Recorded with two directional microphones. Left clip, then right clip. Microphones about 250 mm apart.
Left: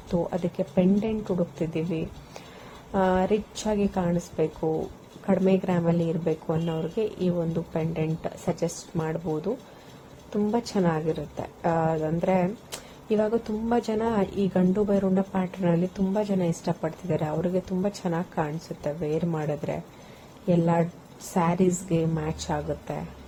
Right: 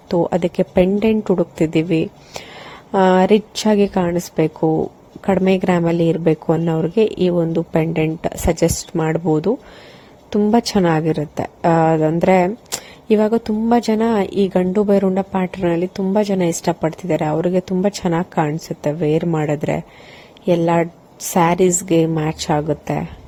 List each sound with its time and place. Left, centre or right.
0.1 s a woman's voice: right